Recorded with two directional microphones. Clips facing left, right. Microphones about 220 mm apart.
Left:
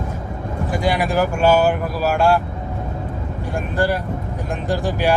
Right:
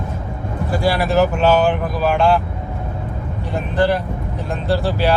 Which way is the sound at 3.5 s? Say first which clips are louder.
Right 3 dB; 10° left (ahead or behind).